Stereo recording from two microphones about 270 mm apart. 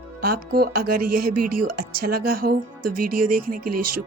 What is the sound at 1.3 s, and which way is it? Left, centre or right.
Speech, right.